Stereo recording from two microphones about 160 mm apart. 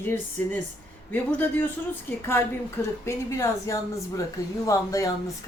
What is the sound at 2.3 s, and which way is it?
A woman's voice, 15° left (ahead or behind).